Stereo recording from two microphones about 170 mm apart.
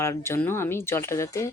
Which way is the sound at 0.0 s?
15° left (ahead or behind).